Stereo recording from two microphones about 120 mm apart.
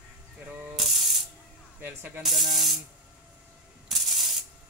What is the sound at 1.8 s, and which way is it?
Speech, 15° right (ahead or behind).